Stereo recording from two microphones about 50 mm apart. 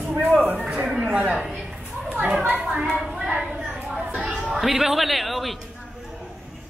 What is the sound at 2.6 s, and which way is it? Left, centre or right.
Speech, right.